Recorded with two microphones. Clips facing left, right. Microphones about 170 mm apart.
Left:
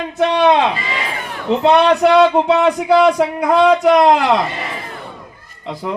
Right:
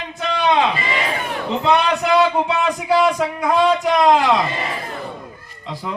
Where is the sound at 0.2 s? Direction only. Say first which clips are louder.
Left 7 dB; 65° left (ahead or behind).